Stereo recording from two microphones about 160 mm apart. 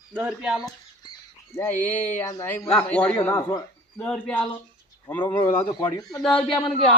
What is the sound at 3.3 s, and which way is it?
Speech, 25° left (ahead or behind).